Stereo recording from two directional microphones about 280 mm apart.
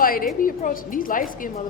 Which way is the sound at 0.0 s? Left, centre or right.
Left.